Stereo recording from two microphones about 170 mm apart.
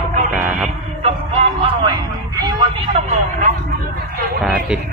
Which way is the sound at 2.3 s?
20° right (ahead or behind).